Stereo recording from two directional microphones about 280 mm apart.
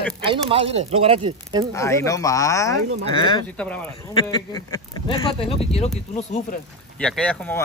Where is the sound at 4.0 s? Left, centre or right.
Centre.